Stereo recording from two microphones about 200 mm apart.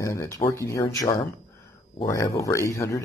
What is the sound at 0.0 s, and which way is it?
Speech, 15° left (ahead or behind).